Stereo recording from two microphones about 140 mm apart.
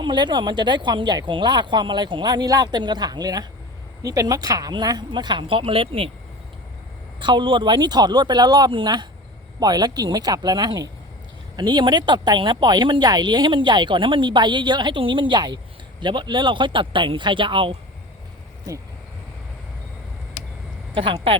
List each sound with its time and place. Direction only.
0.0 s speech: 35° right (ahead or behind)
7.2 s speech: 35° right (ahead or behind)
20.9 s speech: 40° right (ahead or behind)